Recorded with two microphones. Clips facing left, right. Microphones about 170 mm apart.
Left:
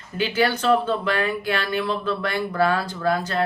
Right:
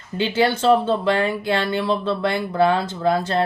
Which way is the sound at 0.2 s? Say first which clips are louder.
Right 3 dB; 25° right (ahead or behind).